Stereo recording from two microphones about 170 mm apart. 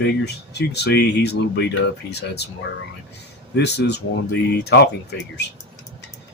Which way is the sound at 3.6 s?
85° left.